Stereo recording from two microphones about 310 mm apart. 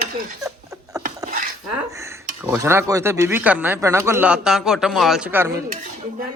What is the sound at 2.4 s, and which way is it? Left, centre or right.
Speech, centre.